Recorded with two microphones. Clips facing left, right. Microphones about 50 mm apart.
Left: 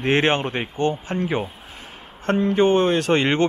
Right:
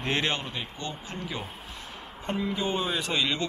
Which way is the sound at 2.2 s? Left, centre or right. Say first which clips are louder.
Left 12 dB; left.